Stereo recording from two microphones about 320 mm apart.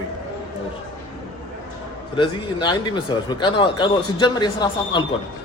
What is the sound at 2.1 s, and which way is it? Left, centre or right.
Speech, centre.